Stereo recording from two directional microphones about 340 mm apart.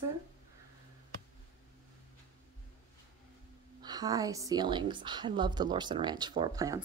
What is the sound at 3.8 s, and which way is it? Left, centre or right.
A woman's voice, centre.